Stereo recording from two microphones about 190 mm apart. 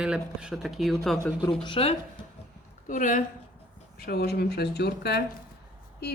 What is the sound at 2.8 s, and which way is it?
Speech, 45° left (ahead or behind).